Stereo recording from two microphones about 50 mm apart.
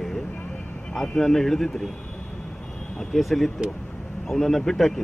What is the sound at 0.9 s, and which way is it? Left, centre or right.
Speech, centre.